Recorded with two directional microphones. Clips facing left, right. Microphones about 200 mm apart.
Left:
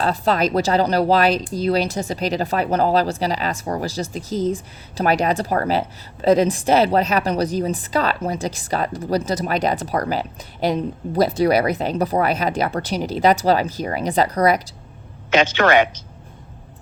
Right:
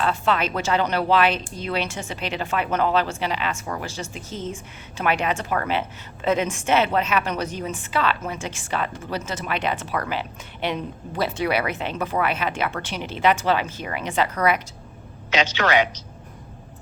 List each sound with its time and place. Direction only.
0.0 s speech: 40° left (ahead or behind)
15.3 s a man's voice: 50° left (ahead or behind)